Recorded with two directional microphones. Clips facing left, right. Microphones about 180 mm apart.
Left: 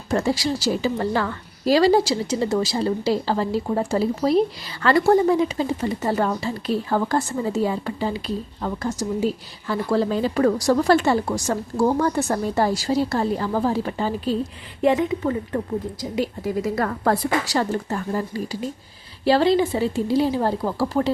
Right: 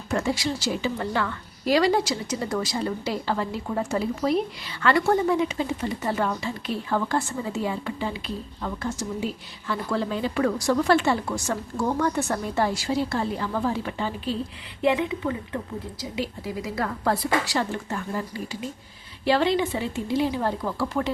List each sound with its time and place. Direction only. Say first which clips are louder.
0.1 s a woman's voice: left 4 dB; 35° left (ahead or behind)